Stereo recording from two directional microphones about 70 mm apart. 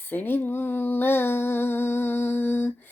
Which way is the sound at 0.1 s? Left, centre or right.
Left.